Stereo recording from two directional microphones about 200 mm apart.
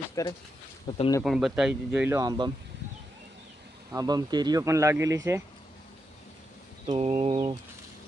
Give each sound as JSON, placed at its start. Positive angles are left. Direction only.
{"t": 0.2, "sound": "speech", "side_deg": 15}
{"t": 0.9, "sound": "speech", "side_deg": 25}
{"t": 1.2, "sound": "speech", "side_deg": 0}
{"t": 3.9, "sound": "speech", "side_deg": -20}
{"t": 6.8, "sound": "a sound", "side_deg": -30}